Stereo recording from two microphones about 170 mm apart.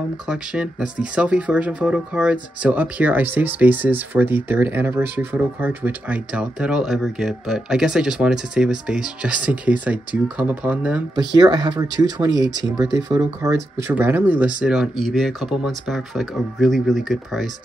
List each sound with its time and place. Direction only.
0.3 s speech: 5° right (ahead or behind)
11.3 s speech: 25° right (ahead or behind); by 17.5 s centre (ahead or behind)